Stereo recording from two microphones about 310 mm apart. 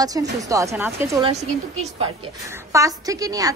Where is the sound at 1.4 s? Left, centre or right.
Right.